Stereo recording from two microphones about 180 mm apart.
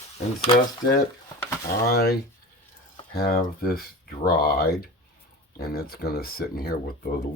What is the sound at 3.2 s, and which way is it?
Speech, 55° left (ahead or behind).